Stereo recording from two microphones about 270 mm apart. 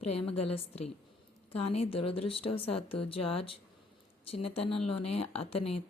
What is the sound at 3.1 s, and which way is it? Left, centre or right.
Speech, left.